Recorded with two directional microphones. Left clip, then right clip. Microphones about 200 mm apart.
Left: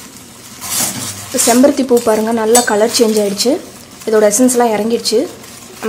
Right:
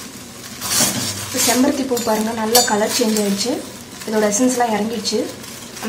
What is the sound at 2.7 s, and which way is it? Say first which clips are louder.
A woman's voice: left 7 dB; 50° left (ahead or behind).